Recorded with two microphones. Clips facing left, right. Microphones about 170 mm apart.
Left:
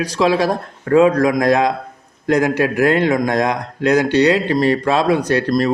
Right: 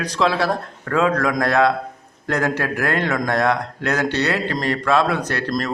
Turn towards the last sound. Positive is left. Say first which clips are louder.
# left 7 dB
turn(degrees=15)  # may be behind; listen again after turning